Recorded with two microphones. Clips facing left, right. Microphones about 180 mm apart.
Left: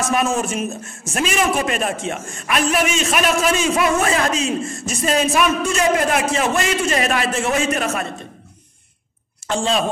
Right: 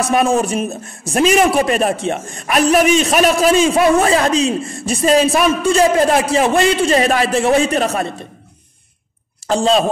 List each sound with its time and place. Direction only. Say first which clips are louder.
0.0 s a man's voice: right 5 dB; 35° right (ahead or behind)
9.5 s a man's voice: right 6 dB; 35° right (ahead or behind)